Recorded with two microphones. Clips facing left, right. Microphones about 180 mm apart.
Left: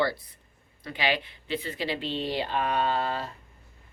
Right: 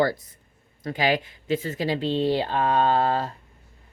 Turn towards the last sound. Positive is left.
turn(degrees=-40)  # may be behind; listen again after turning